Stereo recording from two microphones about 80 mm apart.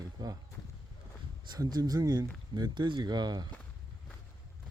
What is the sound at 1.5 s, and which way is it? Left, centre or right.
Speech, right.